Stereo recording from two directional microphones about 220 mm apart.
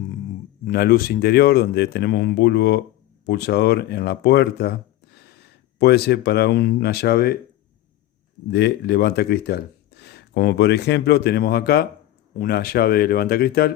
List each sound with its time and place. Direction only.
0.6 s speech: 45° left (ahead or behind)
8.4 s speech: 50° left (ahead or behind)